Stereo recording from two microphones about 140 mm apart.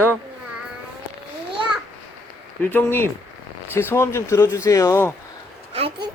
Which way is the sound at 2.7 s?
15° left (ahead or behind).